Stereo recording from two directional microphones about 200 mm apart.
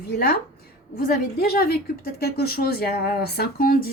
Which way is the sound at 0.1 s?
50° left (ahead or behind).